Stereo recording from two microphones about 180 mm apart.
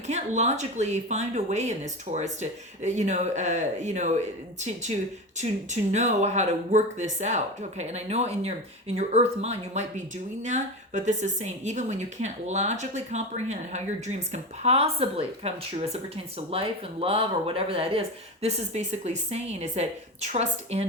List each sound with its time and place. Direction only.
0.1 s a woman's voice: 40° right (ahead or behind)